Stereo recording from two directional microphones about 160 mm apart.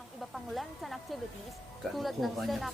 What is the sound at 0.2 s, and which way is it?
Speech, centre (ahead or behind).